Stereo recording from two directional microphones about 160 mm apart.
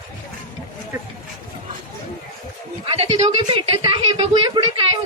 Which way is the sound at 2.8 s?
35° right (ahead or behind).